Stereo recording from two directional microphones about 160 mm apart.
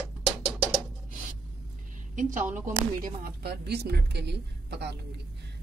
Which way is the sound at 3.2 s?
85° right.